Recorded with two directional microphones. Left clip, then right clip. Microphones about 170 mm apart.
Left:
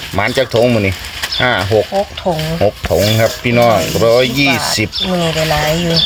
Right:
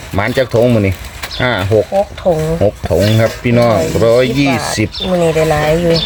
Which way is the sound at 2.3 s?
30° right (ahead or behind).